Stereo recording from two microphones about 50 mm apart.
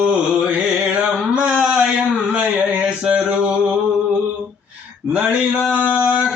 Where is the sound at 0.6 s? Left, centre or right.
Centre.